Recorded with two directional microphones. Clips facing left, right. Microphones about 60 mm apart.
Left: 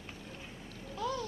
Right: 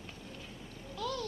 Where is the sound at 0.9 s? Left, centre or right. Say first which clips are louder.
Left 2 dB; left.